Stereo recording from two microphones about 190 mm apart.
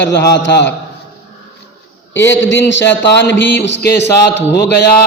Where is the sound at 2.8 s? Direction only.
65° left (ahead or behind).